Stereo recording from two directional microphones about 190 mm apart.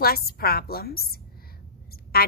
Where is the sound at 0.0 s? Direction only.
55° left (ahead or behind).